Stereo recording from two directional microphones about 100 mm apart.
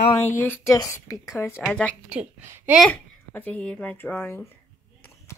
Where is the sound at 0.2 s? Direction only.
20° left (ahead or behind).